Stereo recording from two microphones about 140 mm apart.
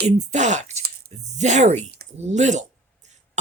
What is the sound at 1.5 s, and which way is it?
Speech, 55° right (ahead or behind).